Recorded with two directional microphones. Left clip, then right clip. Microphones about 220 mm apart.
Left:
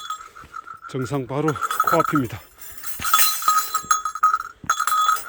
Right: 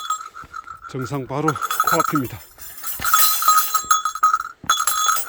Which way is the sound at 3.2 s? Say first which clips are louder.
Right 5 dB; 30° right (ahead or behind).